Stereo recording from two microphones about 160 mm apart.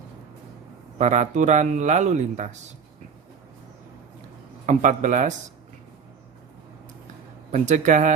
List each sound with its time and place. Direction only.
0.9 s a man's voice: 50° right (ahead or behind)
4.6 s a man's voice: 50° right (ahead or behind)
7.5 s a man's voice: 50° right (ahead or behind)